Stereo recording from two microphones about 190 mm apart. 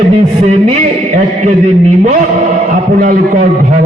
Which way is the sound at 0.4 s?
35° right (ahead or behind).